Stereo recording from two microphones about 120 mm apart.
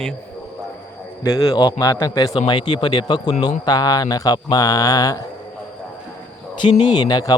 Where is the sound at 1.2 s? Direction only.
30° left (ahead or behind).